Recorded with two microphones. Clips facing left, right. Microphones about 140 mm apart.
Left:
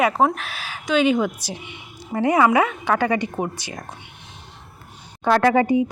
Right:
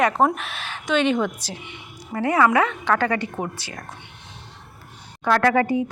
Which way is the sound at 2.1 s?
15° left (ahead or behind).